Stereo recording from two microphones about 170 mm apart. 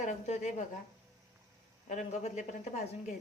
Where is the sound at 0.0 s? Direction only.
45° left (ahead or behind).